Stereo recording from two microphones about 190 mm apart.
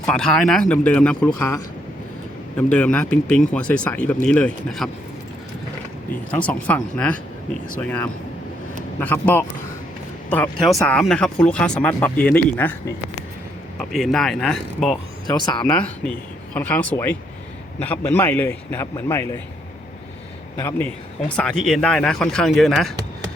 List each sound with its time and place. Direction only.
0.0 s speech: 5° left (ahead or behind)
1.3 s speech: 15° left (ahead or behind)
2.6 s speech: 5° left (ahead or behind)
6.3 s speech: 5° left (ahead or behind)
13.7 s speech: centre (ahead or behind)
15.3 s speech: 20° left (ahead or behind)
15.7 s speech: 5° left (ahead or behind)
20.6 s speech: 15° left (ahead or behind)